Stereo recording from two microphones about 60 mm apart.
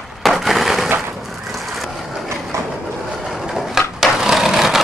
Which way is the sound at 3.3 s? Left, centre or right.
Centre.